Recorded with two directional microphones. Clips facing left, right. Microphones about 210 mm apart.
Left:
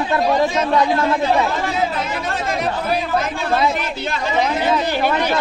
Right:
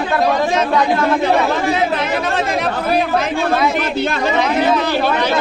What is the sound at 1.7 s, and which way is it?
Speech, 75° right (ahead or behind).